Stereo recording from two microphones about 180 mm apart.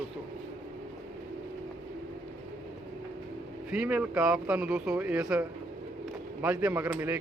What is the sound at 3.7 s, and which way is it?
Speech, 5° right (ahead or behind).